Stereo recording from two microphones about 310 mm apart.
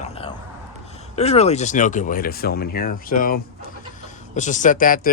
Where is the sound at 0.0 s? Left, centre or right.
Centre.